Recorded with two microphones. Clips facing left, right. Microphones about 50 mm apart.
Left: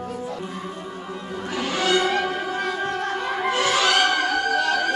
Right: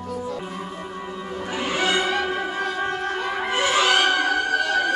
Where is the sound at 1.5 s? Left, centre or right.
Right.